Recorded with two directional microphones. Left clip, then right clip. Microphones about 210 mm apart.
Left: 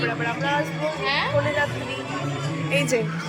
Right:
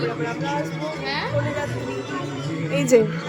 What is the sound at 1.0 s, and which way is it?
Speech, 25° right (ahead or behind).